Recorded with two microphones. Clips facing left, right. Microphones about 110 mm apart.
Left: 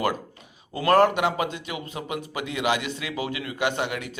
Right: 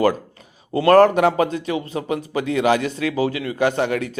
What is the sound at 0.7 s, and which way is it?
A man's voice, 35° right (ahead or behind).